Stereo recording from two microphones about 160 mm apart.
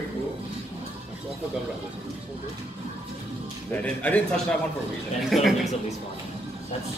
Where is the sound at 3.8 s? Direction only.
10° left (ahead or behind).